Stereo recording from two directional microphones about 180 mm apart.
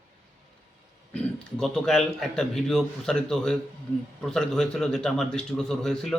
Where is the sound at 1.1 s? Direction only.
5° left (ahead or behind).